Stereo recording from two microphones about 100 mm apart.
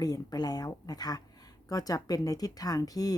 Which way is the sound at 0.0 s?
40° left (ahead or behind).